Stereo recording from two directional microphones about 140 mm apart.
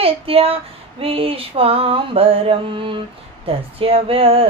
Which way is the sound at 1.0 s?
40° right (ahead or behind).